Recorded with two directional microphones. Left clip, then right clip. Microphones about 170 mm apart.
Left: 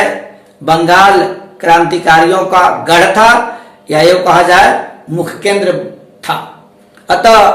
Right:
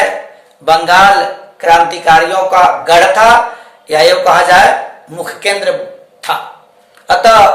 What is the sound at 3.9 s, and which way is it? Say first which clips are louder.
Speech: even; 20° right (ahead or behind).